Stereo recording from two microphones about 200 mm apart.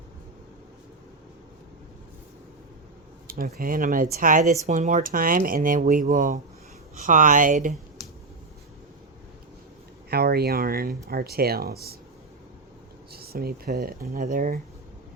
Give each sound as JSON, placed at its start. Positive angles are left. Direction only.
{"t": 3.2, "sound": "speech", "side_deg": -45}
{"t": 10.1, "sound": "speech", "side_deg": -50}
{"t": 13.1, "sound": "speech", "side_deg": -50}